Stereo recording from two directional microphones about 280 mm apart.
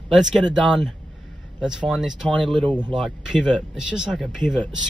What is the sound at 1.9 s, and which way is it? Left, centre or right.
Speech, centre.